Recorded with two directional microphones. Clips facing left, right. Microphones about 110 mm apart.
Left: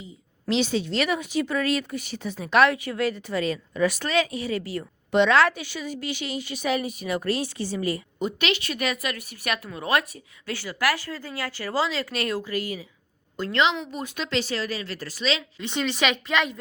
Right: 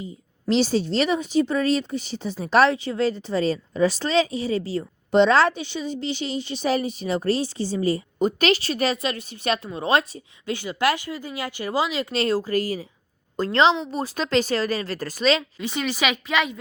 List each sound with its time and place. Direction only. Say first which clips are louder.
0.4 s a woman's voice: right 4 dB; 35° right (ahead or behind); by 12.0 s 15° right (ahead or behind)
12.1 s speech: right 5 dB; 30° right (ahead or behind); by 15.4 s 45° right (ahead or behind)
15.6 s a woman's voice: left 4 dB; 5° right (ahead or behind)